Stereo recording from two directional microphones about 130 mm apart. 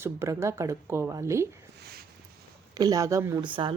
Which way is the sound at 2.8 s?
30° right (ahead or behind).